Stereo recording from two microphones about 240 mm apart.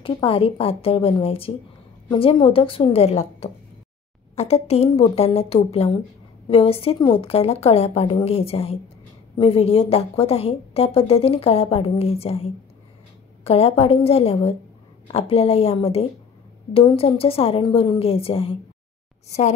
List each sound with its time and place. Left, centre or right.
0.0 s speech: left